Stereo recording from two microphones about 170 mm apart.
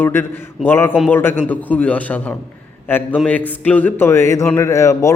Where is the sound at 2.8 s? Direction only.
10° left (ahead or behind).